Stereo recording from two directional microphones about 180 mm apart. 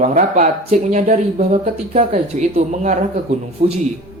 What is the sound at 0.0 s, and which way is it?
Speech, 40° right (ahead or behind).